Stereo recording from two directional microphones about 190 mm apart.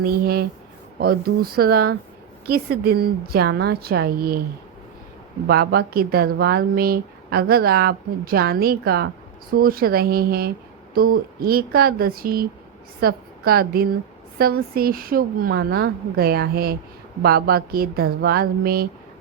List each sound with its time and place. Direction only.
0.0 s a woman's voice: 50° right (ahead or behind)
5.5 s a woman's voice: 55° right (ahead or behind)